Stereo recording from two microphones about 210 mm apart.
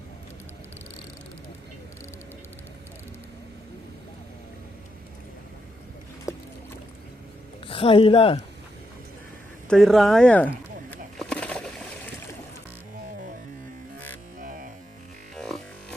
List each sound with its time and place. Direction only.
7.7 s speech: 25° left (ahead or behind)
9.6 s speech: centre (ahead or behind)
11.2 s a sound: 5° left (ahead or behind)
14.3 s music: 40° right (ahead or behind)
15.4 s music: centre (ahead or behind)